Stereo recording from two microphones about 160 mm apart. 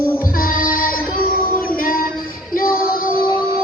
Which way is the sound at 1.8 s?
65° left (ahead or behind).